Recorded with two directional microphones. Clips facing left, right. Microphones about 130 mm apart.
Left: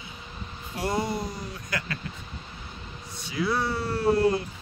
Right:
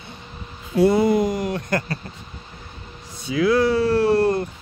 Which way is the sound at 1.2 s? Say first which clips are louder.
Right 13 dB; 90° right.